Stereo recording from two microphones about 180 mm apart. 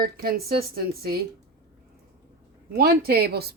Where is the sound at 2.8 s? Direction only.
60° right (ahead or behind).